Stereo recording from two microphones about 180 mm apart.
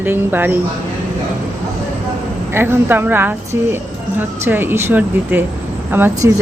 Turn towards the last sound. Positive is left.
turn(degrees=-10)  # may be behind; listen again after turning